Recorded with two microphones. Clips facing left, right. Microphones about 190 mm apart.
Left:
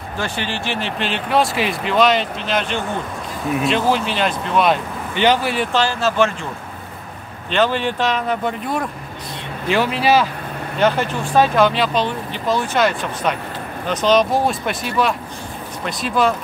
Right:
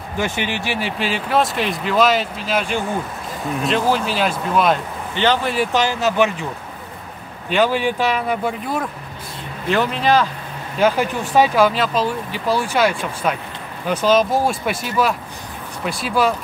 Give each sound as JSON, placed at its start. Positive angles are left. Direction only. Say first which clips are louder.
{"t": 0.2, "sound": "speech", "louder": "right 2 dB", "side_deg": -15}
{"t": 5.1, "sound": "speech", "louder": "left 2 dB", "side_deg": 10}
{"t": 5.7, "sound": "speech", "louder": "even", "side_deg": -15}
{"t": 7.4, "sound": "speech", "louder": "right 1 dB", "side_deg": -10}
{"t": 10.8, "sound": "speech", "louder": "right 1 dB", "side_deg": -5}